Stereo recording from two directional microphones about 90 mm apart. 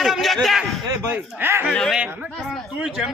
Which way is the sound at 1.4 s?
25° right (ahead or behind).